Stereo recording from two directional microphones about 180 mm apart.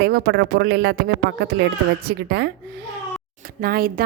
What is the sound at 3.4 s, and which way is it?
Speech, 55° right (ahead or behind).